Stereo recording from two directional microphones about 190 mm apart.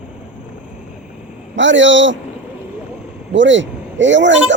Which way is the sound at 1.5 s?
75° right (ahead or behind).